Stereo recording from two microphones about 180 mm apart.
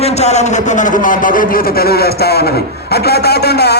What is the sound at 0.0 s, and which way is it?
A man's voice, 35° left (ahead or behind).